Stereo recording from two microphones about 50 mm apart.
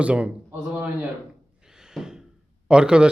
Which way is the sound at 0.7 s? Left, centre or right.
Right.